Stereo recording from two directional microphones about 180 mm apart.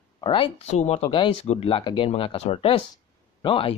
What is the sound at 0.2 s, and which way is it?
Speech, 30° left (ahead or behind).